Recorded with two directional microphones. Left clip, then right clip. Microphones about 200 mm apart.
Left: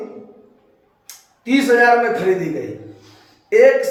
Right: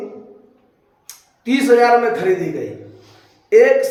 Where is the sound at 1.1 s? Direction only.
25° right (ahead or behind).